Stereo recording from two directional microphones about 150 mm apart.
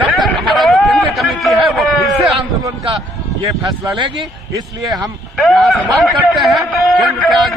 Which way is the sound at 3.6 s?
30° right (ahead or behind).